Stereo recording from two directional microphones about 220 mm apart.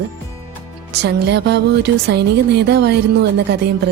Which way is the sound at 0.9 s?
50° right (ahead or behind).